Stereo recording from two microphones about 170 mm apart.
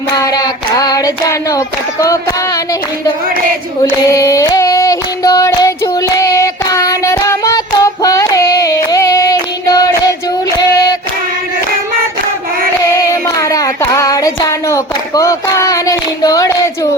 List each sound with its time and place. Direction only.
0.2 s hands: 20° left (ahead or behind)
3.8 s female singing: 20° left (ahead or behind)
12.9 s child singing: 20° left (ahead or behind)